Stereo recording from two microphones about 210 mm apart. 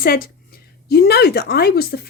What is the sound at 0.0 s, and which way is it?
Speech, 45° left (ahead or behind).